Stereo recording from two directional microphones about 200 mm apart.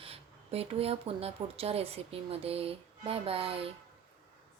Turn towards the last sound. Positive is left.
turn(degrees=-30)  # may be behind; listen again after turning